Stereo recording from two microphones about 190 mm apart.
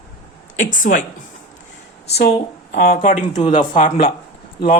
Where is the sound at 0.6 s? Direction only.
45° left (ahead or behind).